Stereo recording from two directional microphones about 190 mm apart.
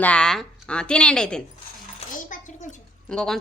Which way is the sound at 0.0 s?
5° left (ahead or behind).